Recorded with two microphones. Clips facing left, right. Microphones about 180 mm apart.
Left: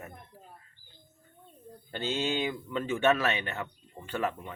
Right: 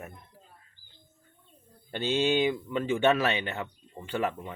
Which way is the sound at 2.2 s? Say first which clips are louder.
Right 6 dB; 20° right (ahead or behind).